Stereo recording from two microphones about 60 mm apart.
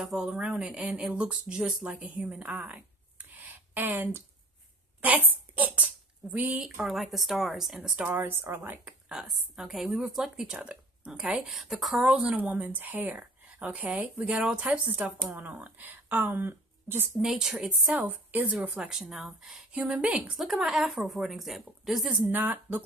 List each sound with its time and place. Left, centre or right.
0.0 s a woman's voice: centre; by 2.1 s right
2.1 s a woman's voice: centre
2.4 s a sound: right
5.5 s a sound: right
6.6 s a woman's voice: centre
8.0 s a woman's voice: right
9.1 s a woman's voice: centre
12.4 s a woman's voice: right
17.2 s a woman's voice: centre
17.6 s a woman's voice: right
18.8 s a woman's voice: centre
19.7 s a woman's voice: centre
20.4 s a woman's voice: centre
22.2 s a woman's voice: right